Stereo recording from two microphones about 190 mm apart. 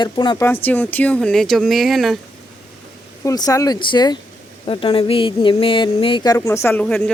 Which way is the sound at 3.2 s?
20° left (ahead or behind).